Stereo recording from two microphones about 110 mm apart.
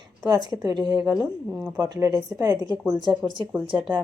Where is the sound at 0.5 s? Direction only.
35° right (ahead or behind).